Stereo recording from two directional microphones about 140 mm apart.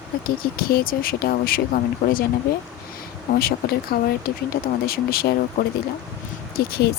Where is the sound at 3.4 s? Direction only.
90° left.